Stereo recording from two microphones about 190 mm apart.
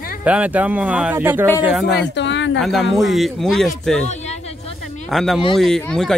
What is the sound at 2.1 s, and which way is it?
Speech, 70° left (ahead or behind).